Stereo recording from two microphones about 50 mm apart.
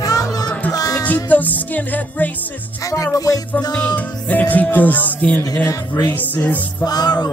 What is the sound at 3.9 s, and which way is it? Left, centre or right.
Music, left.